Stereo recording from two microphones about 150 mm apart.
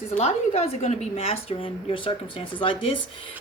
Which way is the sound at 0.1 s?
45° left (ahead or behind).